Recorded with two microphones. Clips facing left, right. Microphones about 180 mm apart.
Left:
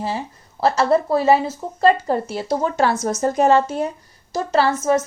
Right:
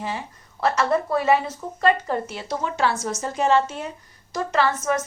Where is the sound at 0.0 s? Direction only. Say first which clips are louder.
Left 5 dB; 30° left (ahead or behind).